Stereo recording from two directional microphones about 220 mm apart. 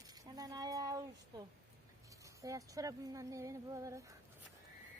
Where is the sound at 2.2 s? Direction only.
15° right (ahead or behind).